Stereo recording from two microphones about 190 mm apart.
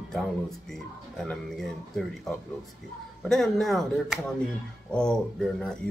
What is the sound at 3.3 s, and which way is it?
Speech, centre (ahead or behind).